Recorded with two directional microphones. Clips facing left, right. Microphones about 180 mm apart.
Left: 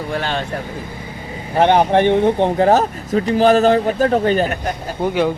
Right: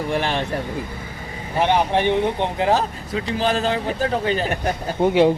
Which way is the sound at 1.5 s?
55° left (ahead or behind).